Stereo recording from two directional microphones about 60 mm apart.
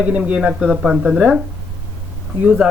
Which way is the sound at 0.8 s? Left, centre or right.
Centre.